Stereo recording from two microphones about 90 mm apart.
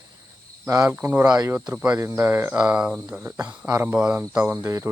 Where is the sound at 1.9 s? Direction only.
30° right (ahead or behind).